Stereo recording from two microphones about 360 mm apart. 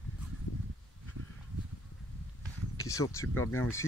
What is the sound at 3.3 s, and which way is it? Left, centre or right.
Speech, left.